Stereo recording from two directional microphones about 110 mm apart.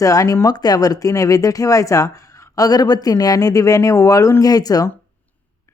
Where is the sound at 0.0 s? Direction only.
30° left (ahead or behind).